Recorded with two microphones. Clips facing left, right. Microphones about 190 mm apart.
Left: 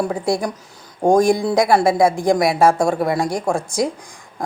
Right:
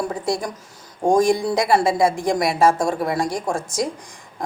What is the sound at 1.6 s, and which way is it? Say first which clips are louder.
A woman's voice: left 5 dB; 55° left (ahead or behind).